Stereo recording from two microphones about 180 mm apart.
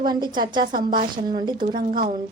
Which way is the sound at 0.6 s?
50° right (ahead or behind).